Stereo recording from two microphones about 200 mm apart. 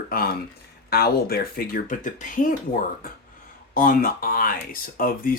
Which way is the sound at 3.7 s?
45° left (ahead or behind).